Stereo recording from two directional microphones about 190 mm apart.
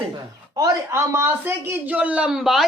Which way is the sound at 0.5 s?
15° right (ahead or behind).